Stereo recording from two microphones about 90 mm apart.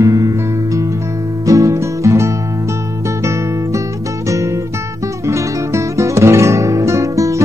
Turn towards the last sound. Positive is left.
turn(degrees=-35)  # may be behind; listen again after turning